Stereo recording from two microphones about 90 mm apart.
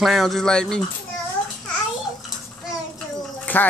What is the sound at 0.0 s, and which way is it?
Speech, centre (ahead or behind).